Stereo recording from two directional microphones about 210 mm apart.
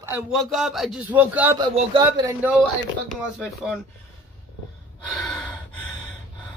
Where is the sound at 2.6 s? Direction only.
Centre (ahead or behind).